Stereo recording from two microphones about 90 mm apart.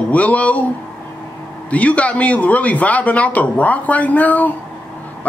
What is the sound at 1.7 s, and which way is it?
A man's voice, 15° left (ahead or behind).